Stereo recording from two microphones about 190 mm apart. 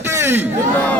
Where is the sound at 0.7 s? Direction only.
10° left (ahead or behind).